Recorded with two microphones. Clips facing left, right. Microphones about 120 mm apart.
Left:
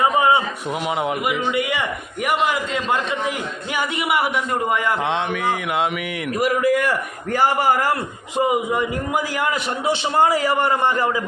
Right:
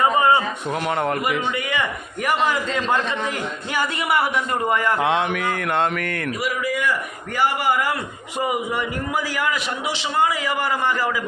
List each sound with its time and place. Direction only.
0.0 s a sound: 10° left (ahead or behind)
0.9 s a man's voice: 5° left (ahead or behind)
5.0 s mantra: centre (ahead or behind)
6.4 s a man's voice: 50° left (ahead or behind)
8.4 s a man's voice: 20° left (ahead or behind)